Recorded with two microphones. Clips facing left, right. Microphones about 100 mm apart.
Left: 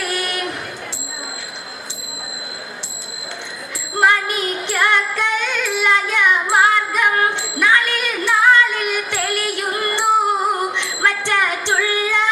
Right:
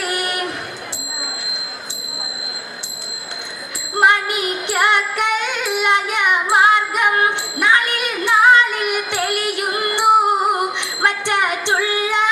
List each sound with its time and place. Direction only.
0.0 s train: 20° right (ahead or behind)
4.0 s music: 20° right (ahead or behind)